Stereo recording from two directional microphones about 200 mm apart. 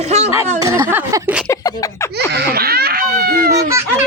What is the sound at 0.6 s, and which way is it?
Speech, 15° right (ahead or behind).